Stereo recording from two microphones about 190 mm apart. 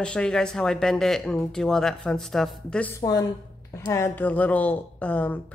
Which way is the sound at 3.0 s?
20° left (ahead or behind).